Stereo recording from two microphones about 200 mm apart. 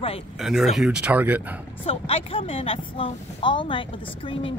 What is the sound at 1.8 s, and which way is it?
Speech, 30° left (ahead or behind).